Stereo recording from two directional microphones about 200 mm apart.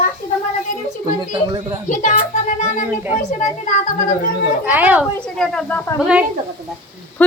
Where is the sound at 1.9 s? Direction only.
40° left (ahead or behind).